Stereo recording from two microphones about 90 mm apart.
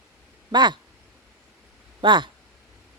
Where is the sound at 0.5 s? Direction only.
55° right (ahead or behind).